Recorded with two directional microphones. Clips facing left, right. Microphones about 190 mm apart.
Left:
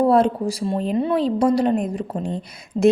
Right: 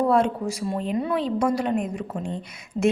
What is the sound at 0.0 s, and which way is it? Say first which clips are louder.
A woman's voice: left 4 dB; 35° left (ahead or behind).